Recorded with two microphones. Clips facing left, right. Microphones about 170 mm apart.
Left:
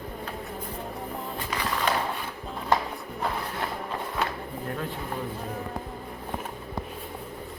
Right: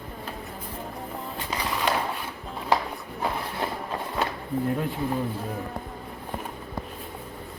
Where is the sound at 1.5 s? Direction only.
20° right (ahead or behind).